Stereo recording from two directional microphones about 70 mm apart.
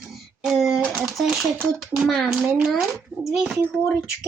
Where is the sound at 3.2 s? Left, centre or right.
Centre.